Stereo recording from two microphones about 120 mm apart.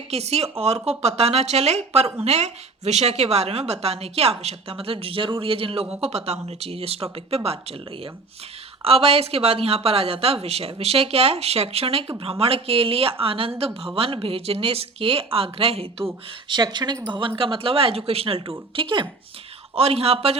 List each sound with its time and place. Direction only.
0.1 s a woman's voice: 60° right (ahead or behind)
6.0 s a woman's voice: 60° right (ahead or behind)
8.8 s a woman's voice: 55° right (ahead or behind)
16.5 s speech: 40° right (ahead or behind)
19.7 s a woman's voice: 55° right (ahead or behind)